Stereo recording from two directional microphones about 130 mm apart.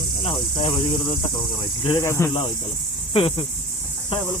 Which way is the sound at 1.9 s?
20° left (ahead or behind).